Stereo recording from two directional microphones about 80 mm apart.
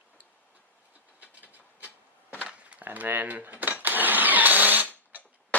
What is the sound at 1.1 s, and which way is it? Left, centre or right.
Train, centre.